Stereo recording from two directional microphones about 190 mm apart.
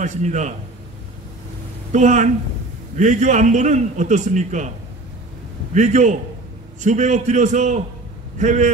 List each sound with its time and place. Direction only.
0.0 s a man's voice: 40° right (ahead or behind)
1.9 s a man's voice: 40° right (ahead or behind)
5.8 s a man's voice: 40° right (ahead or behind)